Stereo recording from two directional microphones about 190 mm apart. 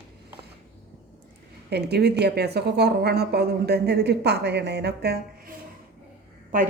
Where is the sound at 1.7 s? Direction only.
60° right (ahead or behind).